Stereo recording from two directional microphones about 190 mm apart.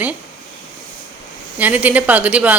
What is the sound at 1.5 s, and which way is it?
Speech, 10° right (ahead or behind).